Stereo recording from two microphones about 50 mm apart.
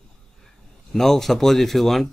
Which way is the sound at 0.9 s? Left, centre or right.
Centre.